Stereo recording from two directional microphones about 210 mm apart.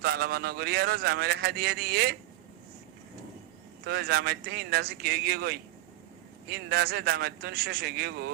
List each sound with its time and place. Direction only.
0.0 s a man's voice: 50° right (ahead or behind)
3.8 s a man's voice: 50° right (ahead or behind)